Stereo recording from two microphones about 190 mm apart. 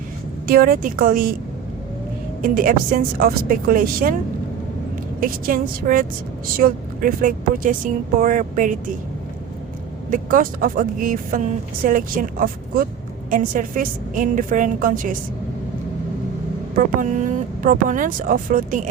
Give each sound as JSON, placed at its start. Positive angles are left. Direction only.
{"t": 0.4, "sound": "speech", "side_deg": -50}
{"t": 2.4, "sound": "speech", "side_deg": -50}
{"t": 5.2, "sound": "speech", "side_deg": -45}
{"t": 10.1, "sound": "speech", "side_deg": -45}
{"t": 16.7, "sound": "speech", "side_deg": -40}